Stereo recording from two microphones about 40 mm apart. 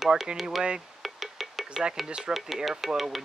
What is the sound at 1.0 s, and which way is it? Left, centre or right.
Music, centre.